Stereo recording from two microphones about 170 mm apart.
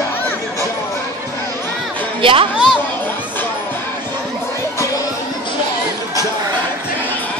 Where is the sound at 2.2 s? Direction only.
30° right (ahead or behind).